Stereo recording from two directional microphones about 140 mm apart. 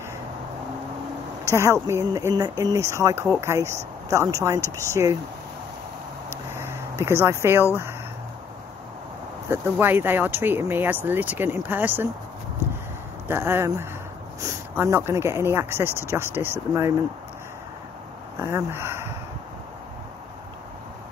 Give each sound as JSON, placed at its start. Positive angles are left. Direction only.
{"t": 1.4, "sound": "speech", "side_deg": -20}
{"t": 6.5, "sound": "a sound", "side_deg": -15}
{"t": 9.5, "sound": "speech", "side_deg": -15}
{"t": 13.3, "sound": "speech", "side_deg": -15}
{"t": 18.4, "sound": "speech", "side_deg": -15}